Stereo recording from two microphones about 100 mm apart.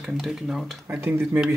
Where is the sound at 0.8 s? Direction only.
20° right (ahead or behind).